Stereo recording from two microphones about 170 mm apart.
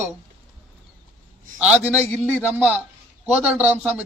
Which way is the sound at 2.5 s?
5° right (ahead or behind).